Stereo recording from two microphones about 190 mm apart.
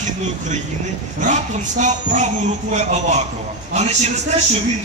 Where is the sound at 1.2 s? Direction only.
40° right (ahead or behind).